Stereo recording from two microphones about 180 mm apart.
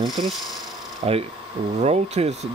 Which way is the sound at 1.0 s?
35° right (ahead or behind).